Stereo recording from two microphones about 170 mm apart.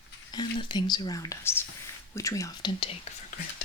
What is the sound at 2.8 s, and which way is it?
Speech, 35° left (ahead or behind).